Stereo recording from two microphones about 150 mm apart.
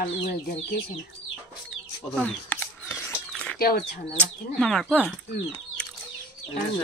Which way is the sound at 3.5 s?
90° left.